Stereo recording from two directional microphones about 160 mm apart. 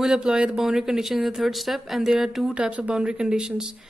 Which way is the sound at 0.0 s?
5° right (ahead or behind).